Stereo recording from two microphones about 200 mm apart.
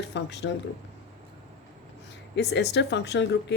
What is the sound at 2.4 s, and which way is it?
Speech, 60° left (ahead or behind).